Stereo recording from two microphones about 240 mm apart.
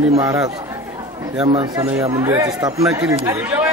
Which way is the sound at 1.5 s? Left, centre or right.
Right.